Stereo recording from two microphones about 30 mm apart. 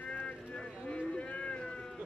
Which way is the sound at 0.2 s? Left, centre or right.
Left.